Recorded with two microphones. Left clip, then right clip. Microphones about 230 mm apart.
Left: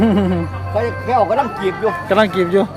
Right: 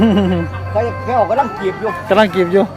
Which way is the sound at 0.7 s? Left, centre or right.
Left.